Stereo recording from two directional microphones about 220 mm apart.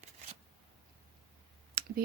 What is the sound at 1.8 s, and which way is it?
Clicking, 45° right (ahead or behind).